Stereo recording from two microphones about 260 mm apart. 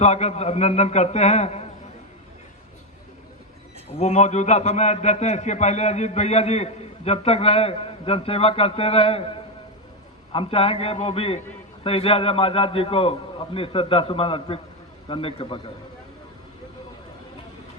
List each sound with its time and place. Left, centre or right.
0.0 s a man's voice: left
3.9 s a man's voice: left
10.3 s a man's voice: left